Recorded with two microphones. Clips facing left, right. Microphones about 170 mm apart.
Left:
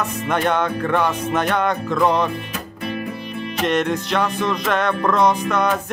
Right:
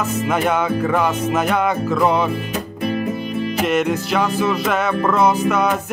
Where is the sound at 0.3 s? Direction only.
5° right (ahead or behind).